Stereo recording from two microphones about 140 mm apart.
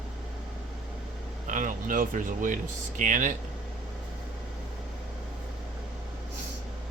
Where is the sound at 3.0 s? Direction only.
65° right (ahead or behind).